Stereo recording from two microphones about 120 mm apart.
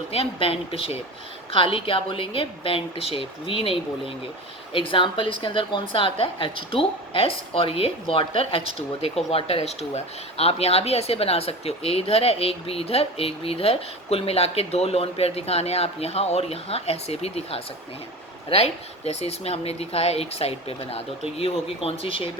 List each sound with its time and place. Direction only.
0.1 s a woman's voice: 50° left (ahead or behind)